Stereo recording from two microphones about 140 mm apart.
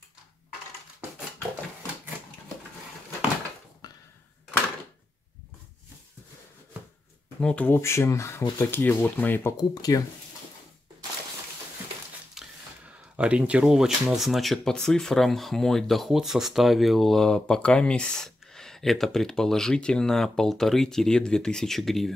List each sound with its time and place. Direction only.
3.8 s a sound: 30° left (ahead or behind)
7.3 s speech: 10° left (ahead or behind)
9.8 s speech: 25° left (ahead or behind)
12.4 s speech: 10° right (ahead or behind)